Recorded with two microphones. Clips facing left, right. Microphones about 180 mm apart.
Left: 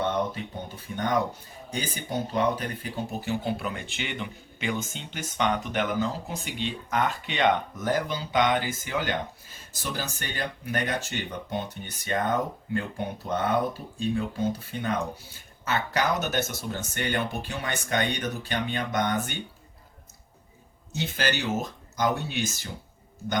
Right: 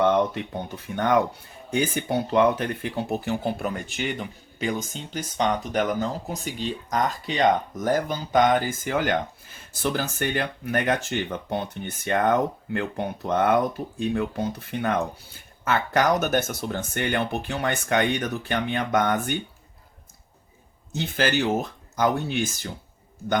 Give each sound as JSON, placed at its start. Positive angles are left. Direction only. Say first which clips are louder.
{"t": 0.0, "sound": "a sound", "louder": "right 7 dB", "side_deg": -55}
{"t": 0.9, "sound": "speech", "louder": "right 5 dB", "side_deg": -65}
{"t": 15.6, "sound": "speech", "louder": "right 5 dB", "side_deg": -55}
{"t": 21.0, "sound": "speech", "louder": "right 5 dB", "side_deg": -55}